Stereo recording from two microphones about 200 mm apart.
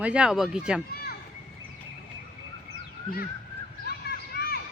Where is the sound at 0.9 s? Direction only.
50° left (ahead or behind).